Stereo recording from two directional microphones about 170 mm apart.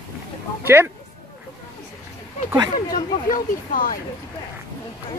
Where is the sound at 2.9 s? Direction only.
55° left (ahead or behind).